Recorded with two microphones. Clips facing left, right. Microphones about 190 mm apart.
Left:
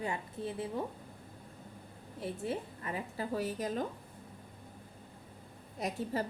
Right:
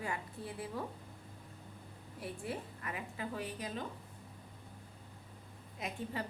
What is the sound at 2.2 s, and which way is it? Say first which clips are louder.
A woman's voice: left 5 dB; 25° left (ahead or behind).